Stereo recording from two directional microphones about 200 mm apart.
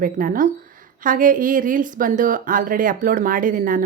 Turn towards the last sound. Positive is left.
turn(degrees=-40)  # may be behind; listen again after turning